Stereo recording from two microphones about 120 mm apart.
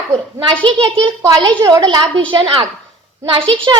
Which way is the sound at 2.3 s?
45° right (ahead or behind).